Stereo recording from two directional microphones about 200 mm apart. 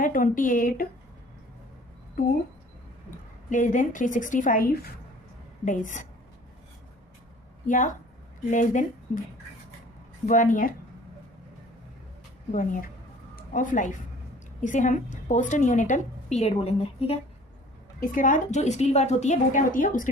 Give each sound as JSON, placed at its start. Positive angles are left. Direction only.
{"t": 0.0, "sound": "a woman's voice", "side_deg": 40}
{"t": 2.2, "sound": "a woman's voice", "side_deg": 45}
{"t": 3.5, "sound": "a woman's voice", "side_deg": 40}
{"t": 7.7, "sound": "a woman's voice", "side_deg": 40}
{"t": 10.2, "sound": "a woman's voice", "side_deg": 40}
{"t": 12.5, "sound": "a woman's voice", "side_deg": 40}
{"t": 18.0, "sound": "a woman's voice", "side_deg": 40}